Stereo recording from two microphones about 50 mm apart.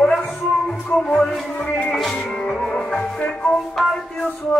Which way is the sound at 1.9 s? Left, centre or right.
Centre.